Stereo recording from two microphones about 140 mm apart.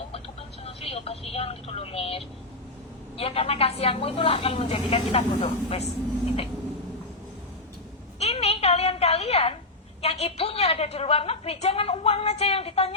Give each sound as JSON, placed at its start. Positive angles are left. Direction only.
{"t": 0.6, "sound": "a woman's voice", "side_deg": 45}
{"t": 8.2, "sound": "a sound", "side_deg": 45}
{"t": 10.0, "sound": "a woman's voice", "side_deg": 50}